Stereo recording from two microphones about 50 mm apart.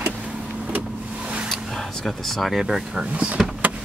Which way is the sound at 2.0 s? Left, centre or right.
Centre.